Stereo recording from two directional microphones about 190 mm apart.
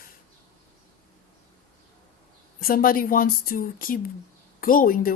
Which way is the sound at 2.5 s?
50° left (ahead or behind).